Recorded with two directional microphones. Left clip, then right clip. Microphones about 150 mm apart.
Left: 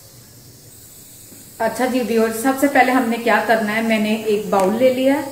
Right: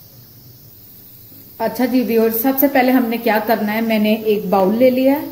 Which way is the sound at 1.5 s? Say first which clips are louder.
Right 1 dB; 45° right (ahead or behind).